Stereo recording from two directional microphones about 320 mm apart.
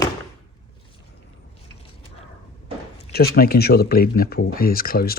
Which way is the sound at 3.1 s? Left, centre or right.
Left.